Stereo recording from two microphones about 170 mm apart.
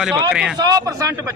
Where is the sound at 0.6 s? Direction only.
20° right (ahead or behind).